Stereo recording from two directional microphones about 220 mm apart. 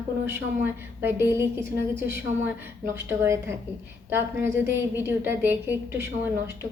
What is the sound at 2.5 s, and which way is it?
A woman's voice, 10° right (ahead or behind).